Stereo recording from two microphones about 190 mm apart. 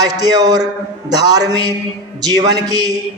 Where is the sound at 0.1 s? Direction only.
20° right (ahead or behind).